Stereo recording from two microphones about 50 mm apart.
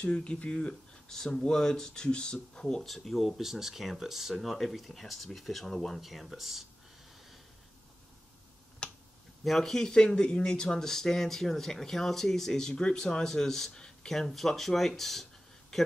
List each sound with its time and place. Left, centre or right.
0.0 s speech: left
2.8 s speech: centre
8.8 s finger snapping: left
9.4 s a man's voice: centre